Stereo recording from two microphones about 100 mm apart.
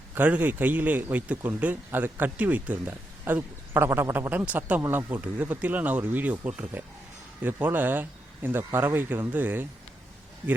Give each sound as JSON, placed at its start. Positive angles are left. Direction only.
{"t": 0.1, "sound": "speech", "side_deg": -15}